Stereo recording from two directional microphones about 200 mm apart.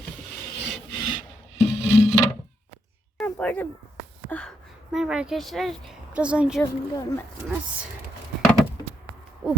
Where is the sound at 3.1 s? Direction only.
5° left (ahead or behind).